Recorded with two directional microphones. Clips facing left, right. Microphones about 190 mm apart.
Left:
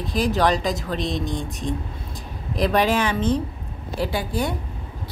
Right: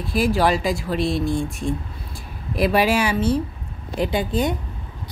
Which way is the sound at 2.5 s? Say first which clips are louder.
Right 1 dB; 10° right (ahead or behind).